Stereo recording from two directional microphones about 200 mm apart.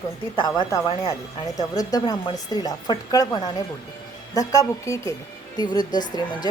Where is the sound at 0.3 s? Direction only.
20° left (ahead or behind).